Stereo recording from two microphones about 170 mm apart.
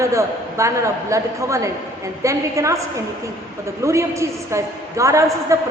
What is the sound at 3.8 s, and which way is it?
A woman's voice, 15° right (ahead or behind).